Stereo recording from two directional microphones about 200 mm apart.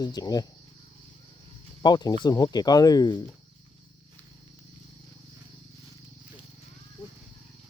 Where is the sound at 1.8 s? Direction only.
20° left (ahead or behind).